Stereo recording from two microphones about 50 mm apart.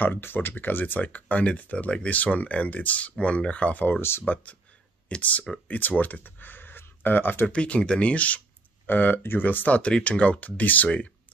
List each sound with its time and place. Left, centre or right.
0.0 s speech: left
7.4 s speech: left
8.8 s speech: left
9.8 s speech: left